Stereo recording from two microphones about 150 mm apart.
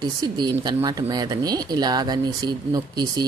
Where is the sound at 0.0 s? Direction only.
25° right (ahead or behind).